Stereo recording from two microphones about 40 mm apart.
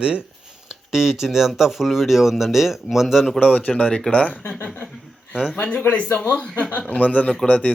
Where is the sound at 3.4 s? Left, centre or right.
Left.